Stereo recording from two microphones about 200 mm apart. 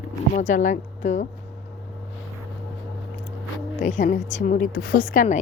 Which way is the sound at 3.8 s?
40° left (ahead or behind).